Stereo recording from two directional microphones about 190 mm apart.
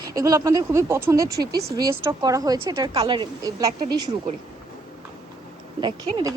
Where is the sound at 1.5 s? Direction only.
55° right (ahead or behind).